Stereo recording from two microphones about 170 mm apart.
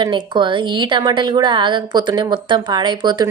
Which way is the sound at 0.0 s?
25° right (ahead or behind).